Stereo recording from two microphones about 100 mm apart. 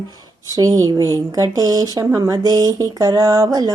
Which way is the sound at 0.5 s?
40° right (ahead or behind).